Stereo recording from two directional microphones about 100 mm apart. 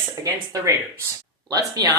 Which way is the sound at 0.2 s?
30° right (ahead or behind).